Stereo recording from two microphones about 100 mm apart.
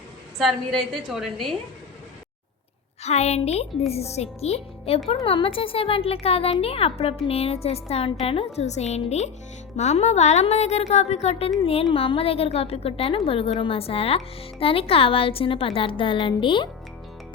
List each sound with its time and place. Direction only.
0.3 s a woman's voice: centre (ahead or behind)
3.0 s a woman's voice: 90° left
5.2 s speech: 65° left (ahead or behind); by 8.1 s 90° left
8.2 s speech: 75° left (ahead or behind)
8.5 s a woman's voice: 90° left
11.6 s speech: 75° left (ahead or behind)
14.6 s a woman's voice: 70° left (ahead or behind)